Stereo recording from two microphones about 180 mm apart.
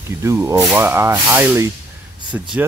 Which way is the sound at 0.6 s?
Centre (ahead or behind).